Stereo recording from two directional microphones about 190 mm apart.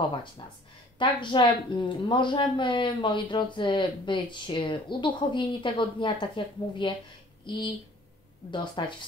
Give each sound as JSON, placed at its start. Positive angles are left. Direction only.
{"t": 0.1, "sound": "speech", "side_deg": 25}